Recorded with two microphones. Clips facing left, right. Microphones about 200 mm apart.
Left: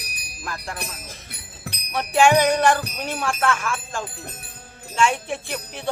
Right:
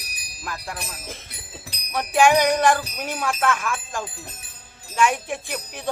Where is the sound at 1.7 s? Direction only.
55° left (ahead or behind).